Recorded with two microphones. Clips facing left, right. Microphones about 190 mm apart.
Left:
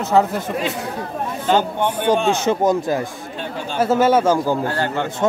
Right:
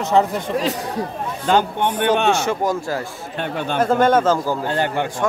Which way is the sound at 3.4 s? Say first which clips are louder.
Right 4 dB; 60° right (ahead or behind).